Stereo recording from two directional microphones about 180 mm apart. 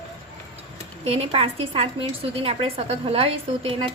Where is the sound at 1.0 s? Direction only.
35° right (ahead or behind).